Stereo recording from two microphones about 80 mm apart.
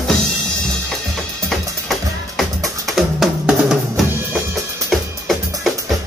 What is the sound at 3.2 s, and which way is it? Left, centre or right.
Drum, centre.